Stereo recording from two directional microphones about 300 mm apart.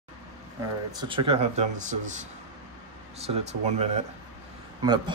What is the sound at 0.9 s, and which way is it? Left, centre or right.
Speech, centre.